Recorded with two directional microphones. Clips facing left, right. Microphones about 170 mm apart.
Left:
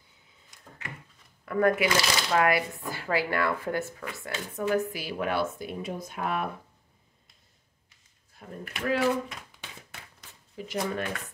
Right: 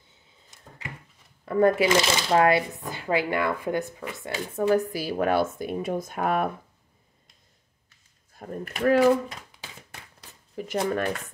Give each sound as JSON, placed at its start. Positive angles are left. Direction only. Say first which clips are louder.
{"t": 0.5, "sound": "a sound", "louder": "right 3 dB", "side_deg": -25}
{"t": 1.4, "sound": "speech", "louder": "right 4 dB", "side_deg": -30}
{"t": 4.6, "sound": "speech", "louder": "right 4 dB", "side_deg": -40}
{"t": 8.4, "sound": "speech", "louder": "right 7 dB", "side_deg": -45}
{"t": 10.5, "sound": "speech", "louder": "right 5 dB", "side_deg": -50}